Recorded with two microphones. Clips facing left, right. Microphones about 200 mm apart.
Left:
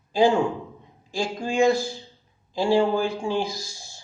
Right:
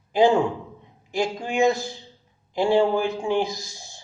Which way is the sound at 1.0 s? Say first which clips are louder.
Right 2 dB; 20° right (ahead or behind).